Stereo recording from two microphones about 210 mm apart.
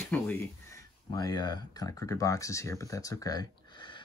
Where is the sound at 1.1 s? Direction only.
20° left (ahead or behind).